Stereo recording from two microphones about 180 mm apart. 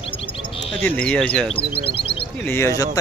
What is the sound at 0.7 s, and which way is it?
Speech, 5° left (ahead or behind).